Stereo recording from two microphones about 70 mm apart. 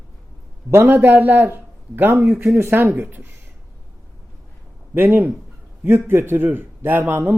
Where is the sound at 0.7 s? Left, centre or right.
Right.